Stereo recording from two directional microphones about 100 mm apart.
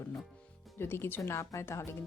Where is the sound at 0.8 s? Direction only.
25° left (ahead or behind).